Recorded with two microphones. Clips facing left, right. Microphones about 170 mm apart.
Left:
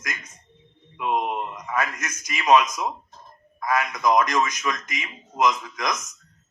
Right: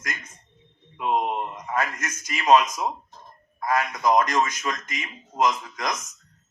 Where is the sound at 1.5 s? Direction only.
35° right (ahead or behind).